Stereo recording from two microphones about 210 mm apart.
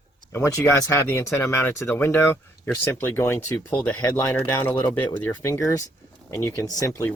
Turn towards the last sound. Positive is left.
turn(degrees=15)  # may be behind; listen again after turning